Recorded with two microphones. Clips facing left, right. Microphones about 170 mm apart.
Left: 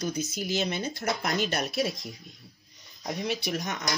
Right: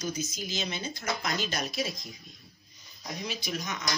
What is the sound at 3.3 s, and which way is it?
Speech, 65° left (ahead or behind).